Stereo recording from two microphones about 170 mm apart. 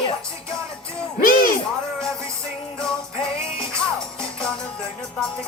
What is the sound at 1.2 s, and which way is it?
Music, 55° left (ahead or behind).